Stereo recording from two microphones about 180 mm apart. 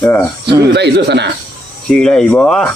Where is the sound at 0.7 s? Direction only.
70° right (ahead or behind).